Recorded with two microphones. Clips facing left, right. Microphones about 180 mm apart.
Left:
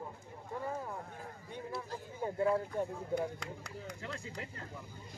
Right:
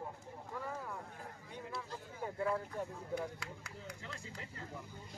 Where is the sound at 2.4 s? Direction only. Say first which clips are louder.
Left 5 dB; 30° left (ahead or behind).